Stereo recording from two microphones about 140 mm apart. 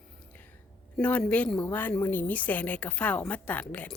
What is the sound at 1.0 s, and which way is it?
A woman's voice, 10° left (ahead or behind).